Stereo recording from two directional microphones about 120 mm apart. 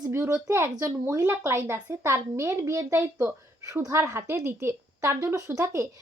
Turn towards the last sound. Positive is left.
turn(degrees=-25)  # may be behind; listen again after turning